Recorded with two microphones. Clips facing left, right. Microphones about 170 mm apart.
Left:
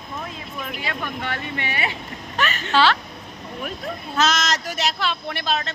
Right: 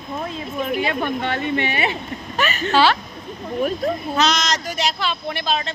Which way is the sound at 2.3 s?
10° right (ahead or behind).